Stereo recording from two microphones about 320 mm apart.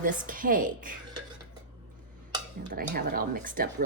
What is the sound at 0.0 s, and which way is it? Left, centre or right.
Speech, right.